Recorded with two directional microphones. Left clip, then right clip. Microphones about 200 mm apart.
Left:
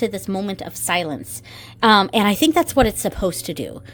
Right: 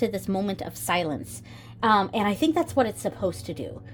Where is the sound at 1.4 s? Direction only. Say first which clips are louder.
Left 7 dB; 35° left (ahead or behind).